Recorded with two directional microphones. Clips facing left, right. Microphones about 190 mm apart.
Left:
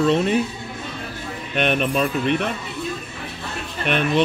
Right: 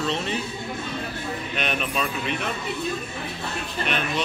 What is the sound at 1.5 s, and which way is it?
Speech, 50° left (ahead or behind).